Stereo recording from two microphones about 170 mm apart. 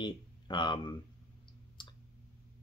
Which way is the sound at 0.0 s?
25° left (ahead or behind).